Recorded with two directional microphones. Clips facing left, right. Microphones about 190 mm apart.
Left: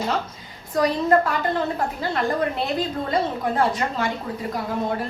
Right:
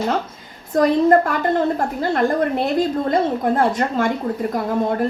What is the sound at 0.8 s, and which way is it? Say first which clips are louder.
A woman's voice: right 5 dB; 50° right (ahead or behind).